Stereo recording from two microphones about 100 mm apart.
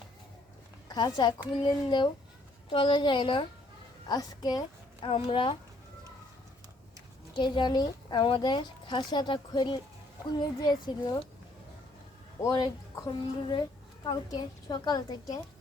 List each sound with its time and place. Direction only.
0.9 s a woman's voice: 40° left (ahead or behind)
2.6 s a woman's voice: 60° left (ahead or behind)
4.1 s a woman's voice: 40° left (ahead or behind)
5.0 s a woman's voice: 65° left (ahead or behind)
7.3 s a woman's voice: 50° left (ahead or behind)
12.4 s a woman's voice: 35° left (ahead or behind)
13.5 s a sound: 45° left (ahead or behind)
14.3 s a woman's voice: 45° left (ahead or behind)